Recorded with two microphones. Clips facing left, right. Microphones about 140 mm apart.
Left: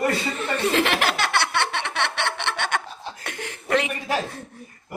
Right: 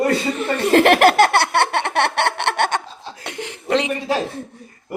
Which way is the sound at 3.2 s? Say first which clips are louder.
Right 4 dB; 20° right (ahead or behind).